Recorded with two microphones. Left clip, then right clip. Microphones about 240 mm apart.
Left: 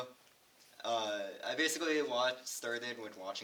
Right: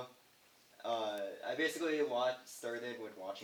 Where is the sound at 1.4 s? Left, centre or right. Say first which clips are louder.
Left 2 dB; left.